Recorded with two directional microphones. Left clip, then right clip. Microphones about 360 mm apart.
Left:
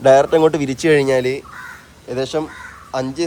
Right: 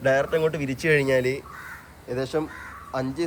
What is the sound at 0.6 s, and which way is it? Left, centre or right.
Speech, left.